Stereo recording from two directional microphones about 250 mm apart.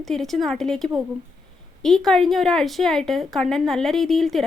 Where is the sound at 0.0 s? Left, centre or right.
Centre.